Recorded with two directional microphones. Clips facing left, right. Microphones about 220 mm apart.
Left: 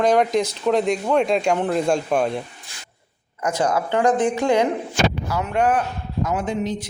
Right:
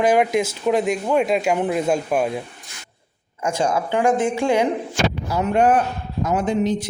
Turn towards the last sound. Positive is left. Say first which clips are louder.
# right 2 dB
turn(degrees=-30)  # may be behind; listen again after turning